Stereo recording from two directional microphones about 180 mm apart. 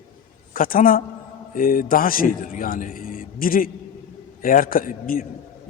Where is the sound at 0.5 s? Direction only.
50° left (ahead or behind).